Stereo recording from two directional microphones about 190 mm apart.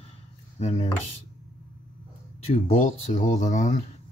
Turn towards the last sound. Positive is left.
turn(degrees=40)  # may be behind; listen again after turning